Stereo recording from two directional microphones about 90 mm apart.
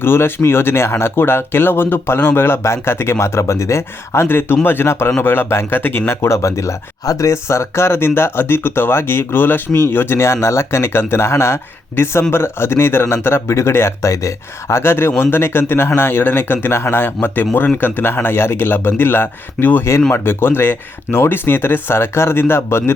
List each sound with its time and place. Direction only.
0.0 s speech: 25° left (ahead or behind)